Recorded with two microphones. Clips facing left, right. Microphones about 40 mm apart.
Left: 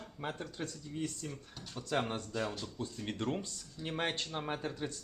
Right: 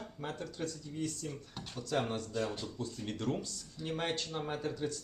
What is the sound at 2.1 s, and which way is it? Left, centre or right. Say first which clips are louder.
Speech: right 1 dB; left.